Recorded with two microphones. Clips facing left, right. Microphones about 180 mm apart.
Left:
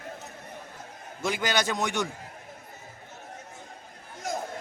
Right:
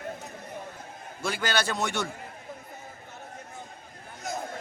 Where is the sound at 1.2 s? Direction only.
20° left (ahead or behind).